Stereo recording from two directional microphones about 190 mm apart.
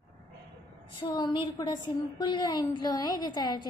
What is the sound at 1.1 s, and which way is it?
A woman's voice, 20° left (ahead or behind).